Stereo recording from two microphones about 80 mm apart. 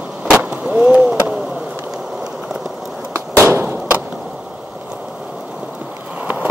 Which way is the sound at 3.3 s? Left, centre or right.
Right.